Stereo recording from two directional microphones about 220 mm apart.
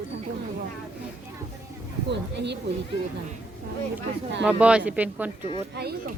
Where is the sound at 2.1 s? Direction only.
50° right (ahead or behind).